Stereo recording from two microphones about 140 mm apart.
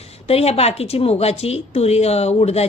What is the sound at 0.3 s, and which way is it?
Speech, 45° left (ahead or behind).